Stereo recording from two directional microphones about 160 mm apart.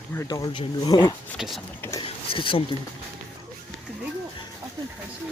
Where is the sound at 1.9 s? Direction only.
35° left (ahead or behind).